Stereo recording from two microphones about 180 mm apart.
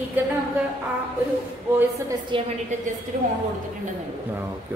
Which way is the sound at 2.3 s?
25° right (ahead or behind).